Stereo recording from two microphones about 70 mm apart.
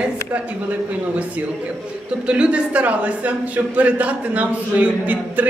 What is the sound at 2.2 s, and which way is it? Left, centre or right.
A woman's voice, centre.